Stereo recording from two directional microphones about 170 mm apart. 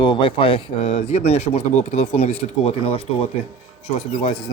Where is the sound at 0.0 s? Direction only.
25° left (ahead or behind).